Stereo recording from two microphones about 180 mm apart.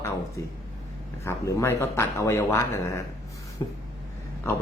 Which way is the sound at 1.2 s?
15° left (ahead or behind).